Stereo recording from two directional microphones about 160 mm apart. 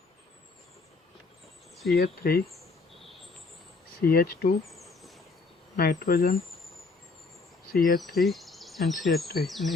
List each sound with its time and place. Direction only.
1.9 s speech: 75° left (ahead or behind)
4.0 s speech: 70° left (ahead or behind)
5.7 s speech: 65° left (ahead or behind)
7.7 s speech: 60° left (ahead or behind)
8.2 s speech: centre (ahead or behind)
9.4 s insect: centre (ahead or behind)